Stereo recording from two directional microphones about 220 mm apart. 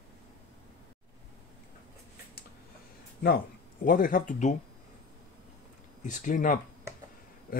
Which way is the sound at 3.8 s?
40° left (ahead or behind).